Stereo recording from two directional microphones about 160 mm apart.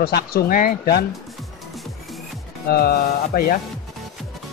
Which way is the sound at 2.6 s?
75° left (ahead or behind).